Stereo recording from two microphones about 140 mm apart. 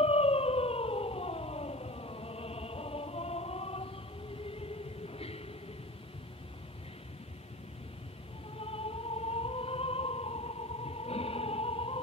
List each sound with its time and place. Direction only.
0.0 s music: 45° left (ahead or behind)
8.5 s music: 45° left (ahead or behind)